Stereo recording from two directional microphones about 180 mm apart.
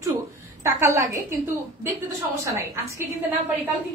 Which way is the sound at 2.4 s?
15° right (ahead or behind).